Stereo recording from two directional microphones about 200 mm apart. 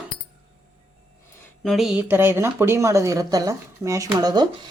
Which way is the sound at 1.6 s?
Centre (ahead or behind).